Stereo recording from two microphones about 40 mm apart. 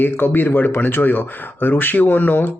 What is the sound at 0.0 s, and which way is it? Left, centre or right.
Speech, left.